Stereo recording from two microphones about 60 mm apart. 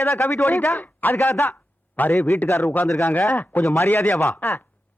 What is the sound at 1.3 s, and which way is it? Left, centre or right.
A man's voice, left.